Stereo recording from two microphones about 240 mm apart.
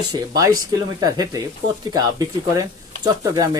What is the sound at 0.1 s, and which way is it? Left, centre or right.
Speech, centre.